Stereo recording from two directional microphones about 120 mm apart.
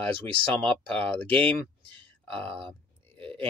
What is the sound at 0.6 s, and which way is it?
Speech, 10° left (ahead or behind).